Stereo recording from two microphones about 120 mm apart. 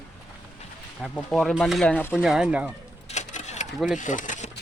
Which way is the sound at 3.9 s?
90° left.